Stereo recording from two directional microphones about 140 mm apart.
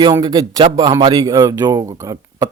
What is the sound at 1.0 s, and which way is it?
Speech, 25° right (ahead or behind).